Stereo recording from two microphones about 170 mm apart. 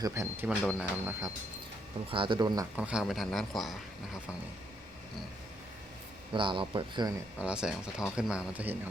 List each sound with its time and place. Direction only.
0.0 s speech: 15° right (ahead or behind)
2.0 s speech: 30° right (ahead or behind)
2.7 s speech: 5° right (ahead or behind)
6.3 s speech: 30° right (ahead or behind)
7.3 s speech: 5° right (ahead or behind)